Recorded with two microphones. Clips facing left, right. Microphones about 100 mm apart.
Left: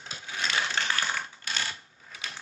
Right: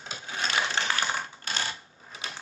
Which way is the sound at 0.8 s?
25° right (ahead or behind).